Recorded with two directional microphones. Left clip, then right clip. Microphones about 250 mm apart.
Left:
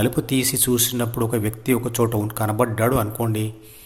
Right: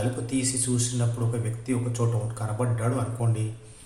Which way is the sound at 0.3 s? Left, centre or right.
Left.